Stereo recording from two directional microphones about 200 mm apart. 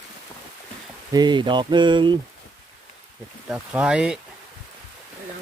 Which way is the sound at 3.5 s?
5° right (ahead or behind).